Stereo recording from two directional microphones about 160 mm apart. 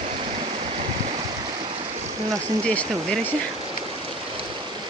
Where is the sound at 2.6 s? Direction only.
10° left (ahead or behind).